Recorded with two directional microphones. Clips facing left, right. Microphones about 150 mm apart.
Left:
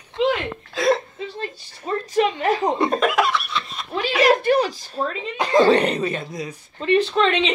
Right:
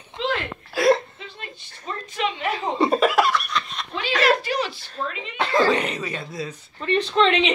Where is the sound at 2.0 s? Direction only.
40° left (ahead or behind).